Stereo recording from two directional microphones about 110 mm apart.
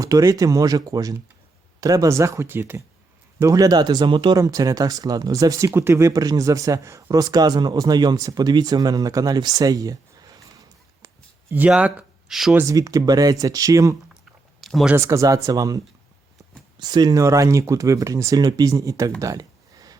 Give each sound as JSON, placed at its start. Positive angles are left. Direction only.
{"t": 0.0, "sound": "speech", "side_deg": -30}
{"t": 4.4, "sound": "speech", "side_deg": -30}
{"t": 11.5, "sound": "speech", "side_deg": -10}
{"t": 12.5, "sound": "speech", "side_deg": -30}
{"t": 14.6, "sound": "a sound", "side_deg": 0}
{"t": 14.9, "sound": "speech", "side_deg": -25}
{"t": 19.2, "sound": "a sound", "side_deg": -30}